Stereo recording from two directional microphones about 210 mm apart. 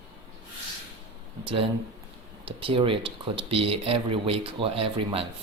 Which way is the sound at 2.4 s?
25° right (ahead or behind).